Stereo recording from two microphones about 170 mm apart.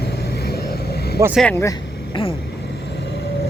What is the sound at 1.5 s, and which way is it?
Speech, 15° left (ahead or behind).